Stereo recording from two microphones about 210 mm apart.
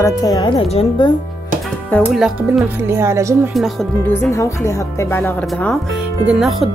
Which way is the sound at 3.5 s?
Centre (ahead or behind).